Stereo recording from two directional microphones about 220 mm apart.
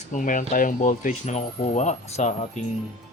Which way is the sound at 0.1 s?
35° left (ahead or behind).